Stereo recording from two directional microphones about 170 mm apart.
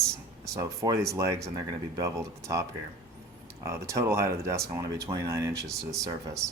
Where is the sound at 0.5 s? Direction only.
20° right (ahead or behind).